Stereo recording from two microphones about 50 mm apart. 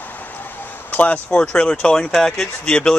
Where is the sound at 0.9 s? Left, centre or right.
Left.